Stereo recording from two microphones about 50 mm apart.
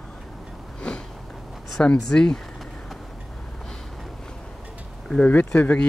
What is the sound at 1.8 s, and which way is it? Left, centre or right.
Speech, centre.